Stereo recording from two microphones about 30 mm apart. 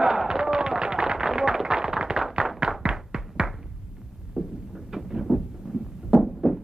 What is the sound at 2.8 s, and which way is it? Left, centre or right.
Music, right.